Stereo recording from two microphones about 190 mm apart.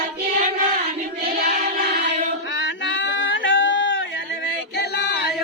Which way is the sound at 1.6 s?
60° right (ahead or behind).